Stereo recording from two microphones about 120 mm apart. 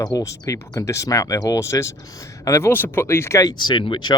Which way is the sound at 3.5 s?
40° left (ahead or behind).